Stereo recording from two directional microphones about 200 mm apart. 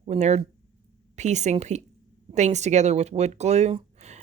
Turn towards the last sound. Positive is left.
turn(degrees=-35)  # may be behind; listen again after turning